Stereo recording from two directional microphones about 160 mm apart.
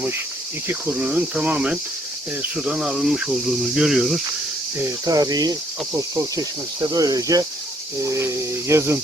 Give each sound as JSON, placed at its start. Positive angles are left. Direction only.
{"t": 0.7, "sound": "cricket", "side_deg": -10}
{"t": 2.4, "sound": "speech", "side_deg": -5}
{"t": 4.8, "sound": "speech", "side_deg": -20}
{"t": 7.9, "sound": "cricket", "side_deg": -20}